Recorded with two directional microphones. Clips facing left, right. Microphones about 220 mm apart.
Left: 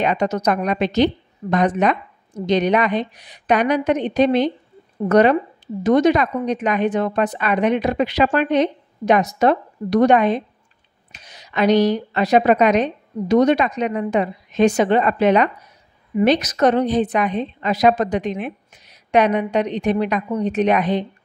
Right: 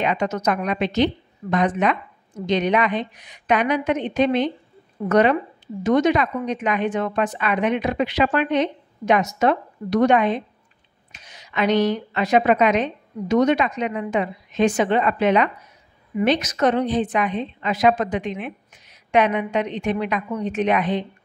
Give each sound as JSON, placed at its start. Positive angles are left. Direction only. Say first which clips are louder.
{"t": 0.0, "sound": "a woman's voice", "louder": "left 3 dB", "side_deg": 40}